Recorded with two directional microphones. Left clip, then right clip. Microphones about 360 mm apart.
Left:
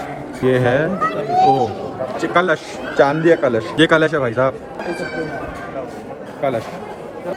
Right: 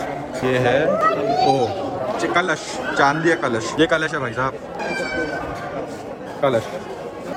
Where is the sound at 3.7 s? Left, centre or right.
Left.